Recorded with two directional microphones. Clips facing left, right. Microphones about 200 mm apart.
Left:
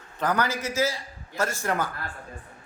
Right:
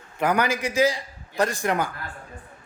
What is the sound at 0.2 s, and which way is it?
A man's voice, 10° right (ahead or behind).